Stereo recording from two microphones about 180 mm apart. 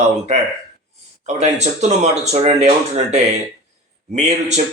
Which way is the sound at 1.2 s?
40° right (ahead or behind).